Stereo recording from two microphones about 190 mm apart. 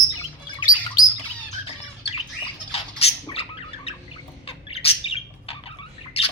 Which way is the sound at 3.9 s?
30° left (ahead or behind).